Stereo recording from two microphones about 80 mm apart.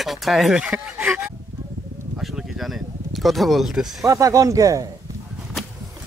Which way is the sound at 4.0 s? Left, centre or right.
Right.